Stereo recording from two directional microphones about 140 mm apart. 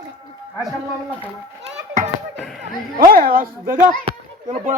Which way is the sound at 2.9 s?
85° right.